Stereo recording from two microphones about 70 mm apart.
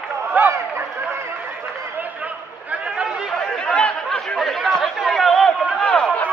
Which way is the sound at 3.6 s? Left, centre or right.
Centre.